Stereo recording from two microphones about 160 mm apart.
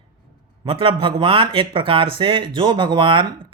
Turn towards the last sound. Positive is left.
turn(degrees=-30)  # may be behind; listen again after turning